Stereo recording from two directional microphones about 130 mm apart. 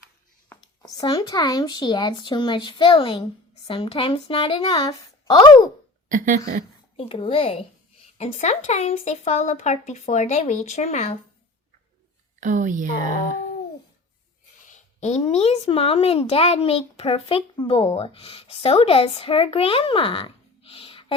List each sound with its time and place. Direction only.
0.5 s a sound: 10° left (ahead or behind)
0.9 s speech: 30° left (ahead or behind)
6.1 s speech: 80° right
6.9 s speech: 45° left (ahead or behind)
12.4 s a woman's voice: 85° right
14.7 s speech: 60° left (ahead or behind); by 21.0 s 45° left (ahead or behind)